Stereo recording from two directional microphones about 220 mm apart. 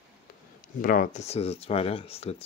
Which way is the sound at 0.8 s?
40° left (ahead or behind).